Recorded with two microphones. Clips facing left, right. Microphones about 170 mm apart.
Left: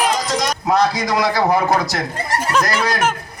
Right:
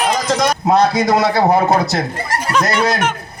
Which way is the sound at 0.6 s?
25° right (ahead or behind).